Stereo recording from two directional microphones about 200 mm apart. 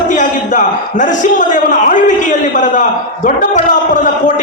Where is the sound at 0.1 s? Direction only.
40° left (ahead or behind).